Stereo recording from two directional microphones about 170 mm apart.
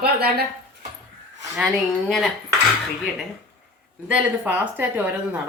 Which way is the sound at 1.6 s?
Centre (ahead or behind).